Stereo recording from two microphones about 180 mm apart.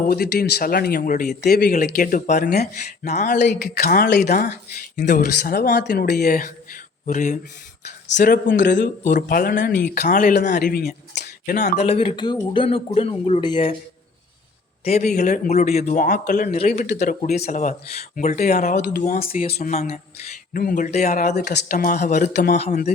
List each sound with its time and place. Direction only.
0.1 s speech: 55° left (ahead or behind)
1.4 s speech: 60° left (ahead or behind)
3.1 s speech: 40° left (ahead or behind)
3.6 s speech: 55° left (ahead or behind)
4.9 s speech: 45° left (ahead or behind)
5.2 s speech: 60° left (ahead or behind)
7.1 s speech: 45° left (ahead or behind); by 13.7 s 25° left (ahead or behind)
14.8 s speech: 40° left (ahead or behind)
19.4 s speech: 40° left (ahead or behind)
20.5 s speech: 50° left (ahead or behind)
21.3 s speech: 70° left (ahead or behind)
21.7 s speech: 45° left (ahead or behind)